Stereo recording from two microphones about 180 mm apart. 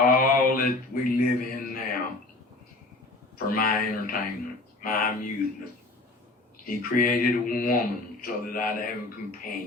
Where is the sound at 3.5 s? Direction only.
50° left (ahead or behind).